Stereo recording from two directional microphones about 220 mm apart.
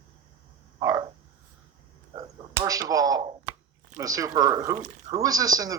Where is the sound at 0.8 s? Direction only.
15° right (ahead or behind).